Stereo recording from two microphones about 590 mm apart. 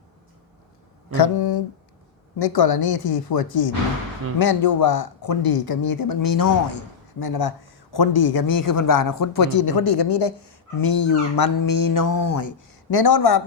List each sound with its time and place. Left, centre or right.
1.1 s speech: left